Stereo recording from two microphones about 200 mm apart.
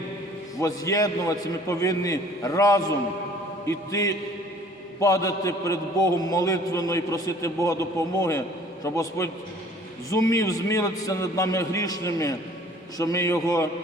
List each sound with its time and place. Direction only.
0.6 s a man's voice: 15° left (ahead or behind)